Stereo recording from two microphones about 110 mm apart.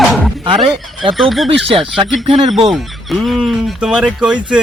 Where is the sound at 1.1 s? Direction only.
Centre (ahead or behind).